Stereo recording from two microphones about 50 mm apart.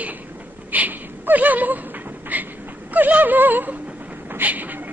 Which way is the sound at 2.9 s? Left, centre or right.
Right.